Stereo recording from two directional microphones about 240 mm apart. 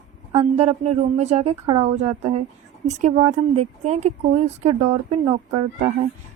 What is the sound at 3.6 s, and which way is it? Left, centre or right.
Speech, right.